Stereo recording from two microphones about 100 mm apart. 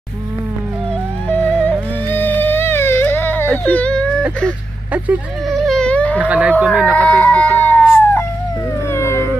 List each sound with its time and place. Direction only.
1.4 s music: 10° left (ahead or behind)
3.6 s whimper: 15° left (ahead or behind)
4.9 s speech: 15° right (ahead or behind)
5.5 s whimper: 5° left (ahead or behind)
6.1 s speech: 15° right (ahead or behind)
6.8 s chicken: 10° left (ahead or behind)
8.9 s cat: 25° left (ahead or behind)